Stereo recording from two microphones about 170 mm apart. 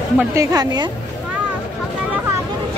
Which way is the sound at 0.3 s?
20° right (ahead or behind).